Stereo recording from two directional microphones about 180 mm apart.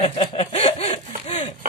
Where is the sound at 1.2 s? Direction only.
35° left (ahead or behind).